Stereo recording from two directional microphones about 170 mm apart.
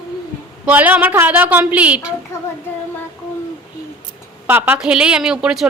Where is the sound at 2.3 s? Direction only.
15° left (ahead or behind).